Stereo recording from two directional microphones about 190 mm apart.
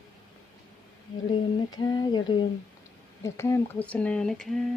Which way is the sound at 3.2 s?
15° left (ahead or behind).